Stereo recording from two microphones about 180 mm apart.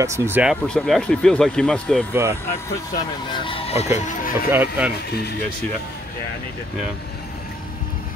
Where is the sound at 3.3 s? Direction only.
30° left (ahead or behind).